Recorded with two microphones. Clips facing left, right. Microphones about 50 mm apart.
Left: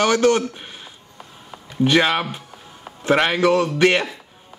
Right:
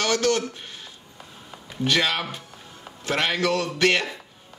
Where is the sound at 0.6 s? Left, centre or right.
Centre.